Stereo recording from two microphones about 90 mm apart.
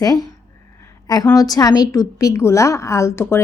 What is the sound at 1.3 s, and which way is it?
A woman's voice, 45° left (ahead or behind).